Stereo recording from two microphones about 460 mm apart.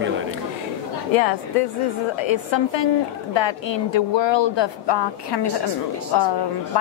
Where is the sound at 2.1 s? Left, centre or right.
Left.